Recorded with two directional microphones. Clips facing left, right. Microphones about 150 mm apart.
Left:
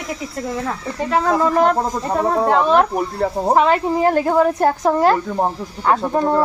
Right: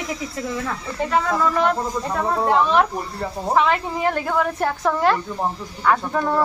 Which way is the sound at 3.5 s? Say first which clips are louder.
Left 3 dB; 40° left (ahead or behind).